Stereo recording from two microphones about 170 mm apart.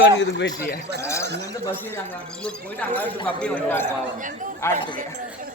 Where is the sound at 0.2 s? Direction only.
85° left.